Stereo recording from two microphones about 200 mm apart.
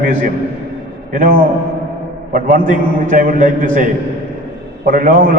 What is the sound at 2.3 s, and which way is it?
A man's voice, 40° right (ahead or behind).